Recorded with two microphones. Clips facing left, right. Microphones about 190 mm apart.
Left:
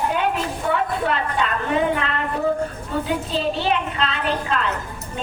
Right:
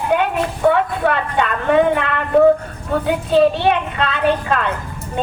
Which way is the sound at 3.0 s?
60° right (ahead or behind).